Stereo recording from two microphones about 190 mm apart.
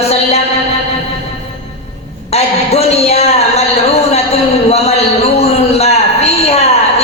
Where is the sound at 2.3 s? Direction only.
35° left (ahead or behind).